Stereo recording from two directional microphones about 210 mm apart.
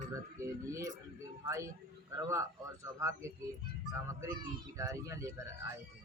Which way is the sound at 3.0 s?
15° right (ahead or behind).